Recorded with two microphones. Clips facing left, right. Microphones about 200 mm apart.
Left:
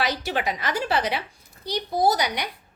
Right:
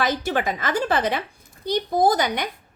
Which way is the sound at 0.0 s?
50° right (ahead or behind).